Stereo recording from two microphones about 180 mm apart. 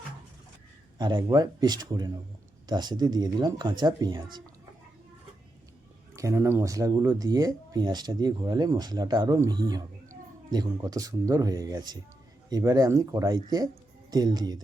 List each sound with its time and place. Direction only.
0.9 s speech: 25° right (ahead or behind)
6.1 s speech: 15° right (ahead or behind)